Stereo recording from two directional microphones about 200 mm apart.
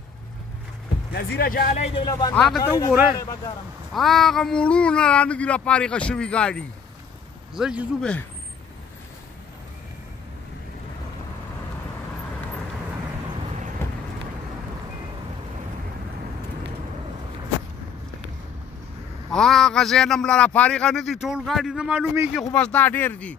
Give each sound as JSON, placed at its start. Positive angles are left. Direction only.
{"t": 1.1, "sound": "speech", "side_deg": 50}
{"t": 2.3, "sound": "a man's voice", "side_deg": 0}
{"t": 2.6, "sound": "speech", "side_deg": 15}
{"t": 3.9, "sound": "a man's voice", "side_deg": 0}
{"t": 13.8, "sound": "vehicle", "side_deg": 10}
{"t": 19.3, "sound": "a man's voice", "side_deg": 0}
{"t": 22.3, "sound": "speech", "side_deg": 5}